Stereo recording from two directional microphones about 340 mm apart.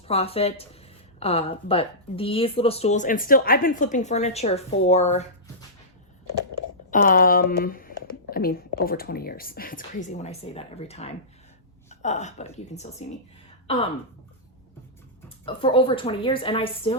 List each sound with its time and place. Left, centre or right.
0.1 s speech: centre
6.9 s speech: left
15.4 s speech: centre